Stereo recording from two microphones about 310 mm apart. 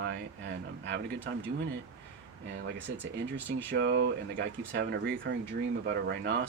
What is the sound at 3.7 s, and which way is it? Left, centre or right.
Speech, right.